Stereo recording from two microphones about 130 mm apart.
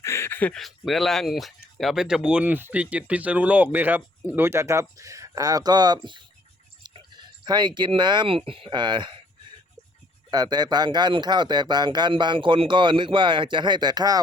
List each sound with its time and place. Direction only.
0.0 s a sound: 20° left (ahead or behind)
0.6 s speech: centre (ahead or behind); by 9.2 s 35° right (ahead or behind)
10.3 s speech: 30° right (ahead or behind)